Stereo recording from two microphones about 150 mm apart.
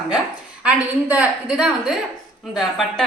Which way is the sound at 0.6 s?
10° right (ahead or behind).